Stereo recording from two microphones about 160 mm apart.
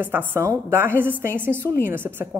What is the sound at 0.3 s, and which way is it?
A woman's voice, 15° right (ahead or behind).